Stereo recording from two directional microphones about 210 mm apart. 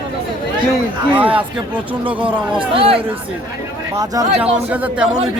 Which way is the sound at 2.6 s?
25° right (ahead or behind).